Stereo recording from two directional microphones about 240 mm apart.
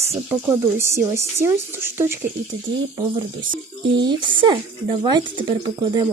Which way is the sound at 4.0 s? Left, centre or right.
Centre.